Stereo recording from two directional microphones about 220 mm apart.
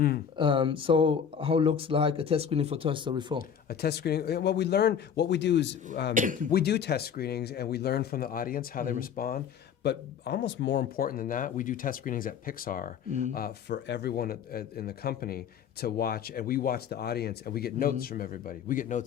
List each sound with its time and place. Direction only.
0.3 s speech: 20° right (ahead or behind)
3.7 s speech: 45° left (ahead or behind)
6.1 s speech: 35° right (ahead or behind)
6.5 s speech: 45° left (ahead or behind)